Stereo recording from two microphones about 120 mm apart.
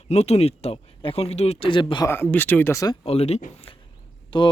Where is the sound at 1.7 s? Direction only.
40° left (ahead or behind).